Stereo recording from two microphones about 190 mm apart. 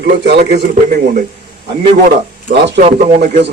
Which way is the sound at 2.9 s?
35° right (ahead or behind).